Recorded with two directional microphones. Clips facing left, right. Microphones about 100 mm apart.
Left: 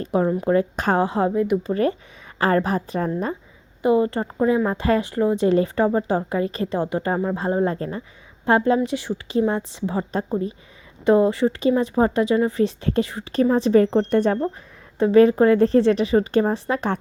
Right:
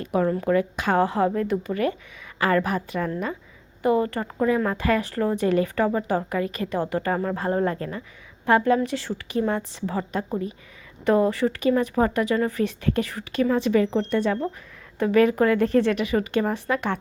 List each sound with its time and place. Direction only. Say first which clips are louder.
0.0 s speech: left 2 dB; 25° left (ahead or behind)
0.5 s a woman's voice: left 2 dB; 35° left (ahead or behind)
0.9 s speech: even; 25° left (ahead or behind)
1.6 s a woman's voice: left 4 dB; 30° left (ahead or behind)
3.8 s speech: left 3 dB; 20° left (ahead or behind)
13.3 s a woman's voice: left 4 dB; 35° left (ahead or behind)
13.8 s speech: left 4 dB; 45° left (ahead or behind)
14.9 s speech: left 5 dB; 25° left (ahead or behind)